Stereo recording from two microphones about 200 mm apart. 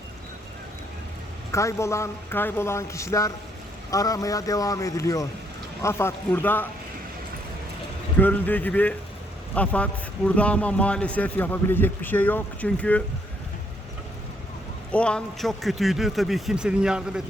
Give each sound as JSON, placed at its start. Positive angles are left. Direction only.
{"t": 1.5, "sound": "a man's voice", "side_deg": 15}
{"t": 8.2, "sound": "a man's voice", "side_deg": 10}
{"t": 14.9, "sound": "a man's voice", "side_deg": 5}